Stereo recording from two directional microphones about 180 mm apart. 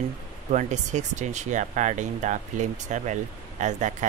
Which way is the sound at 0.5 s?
40° right (ahead or behind).